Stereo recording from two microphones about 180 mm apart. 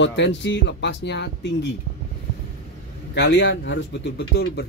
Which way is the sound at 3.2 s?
85° left.